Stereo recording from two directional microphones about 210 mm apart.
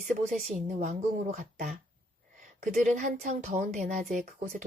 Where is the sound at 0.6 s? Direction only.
35° right (ahead or behind).